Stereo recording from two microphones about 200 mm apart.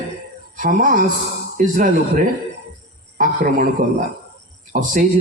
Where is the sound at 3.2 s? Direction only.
40° right (ahead or behind).